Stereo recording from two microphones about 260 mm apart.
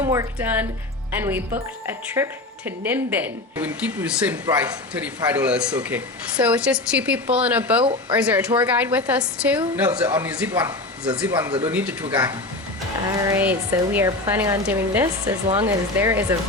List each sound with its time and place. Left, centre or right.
0.0 s speech: centre
11.3 s speech: centre
11.6 s speech: centre
13.1 s speech: centre